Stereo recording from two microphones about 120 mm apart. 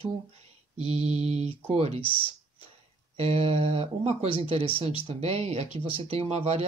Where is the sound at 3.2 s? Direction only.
55° right (ahead or behind).